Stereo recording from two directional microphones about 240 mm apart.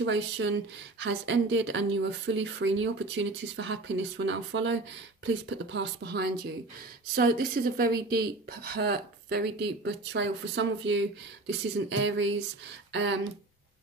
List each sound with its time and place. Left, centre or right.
0.0 s a woman's voice: right